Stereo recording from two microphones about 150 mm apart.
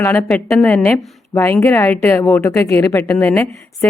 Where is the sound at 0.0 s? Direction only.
15° left (ahead or behind).